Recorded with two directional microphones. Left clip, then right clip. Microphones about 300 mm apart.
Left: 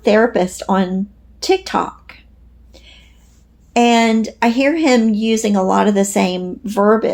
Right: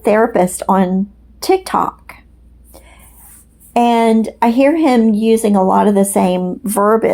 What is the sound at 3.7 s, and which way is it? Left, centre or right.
Speech, right.